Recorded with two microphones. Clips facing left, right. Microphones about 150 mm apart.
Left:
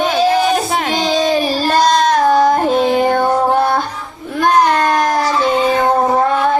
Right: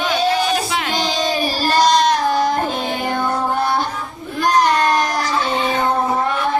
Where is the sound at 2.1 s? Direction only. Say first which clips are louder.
Left 6 dB; 50° left (ahead or behind).